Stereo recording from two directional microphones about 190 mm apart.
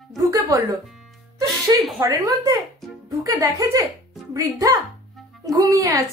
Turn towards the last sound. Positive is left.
turn(degrees=-15)  # may be behind; listen again after turning